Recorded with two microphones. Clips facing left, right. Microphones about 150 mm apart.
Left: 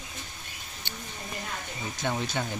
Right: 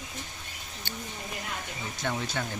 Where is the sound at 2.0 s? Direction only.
15° left (ahead or behind).